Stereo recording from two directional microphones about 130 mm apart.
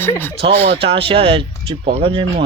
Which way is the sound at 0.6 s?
50° right (ahead or behind).